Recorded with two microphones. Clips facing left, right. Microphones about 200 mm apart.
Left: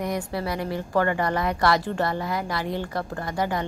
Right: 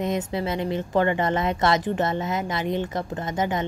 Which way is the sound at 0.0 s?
20° right (ahead or behind).